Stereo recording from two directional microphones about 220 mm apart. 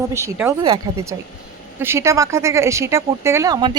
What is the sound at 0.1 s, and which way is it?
Speech, 10° right (ahead or behind).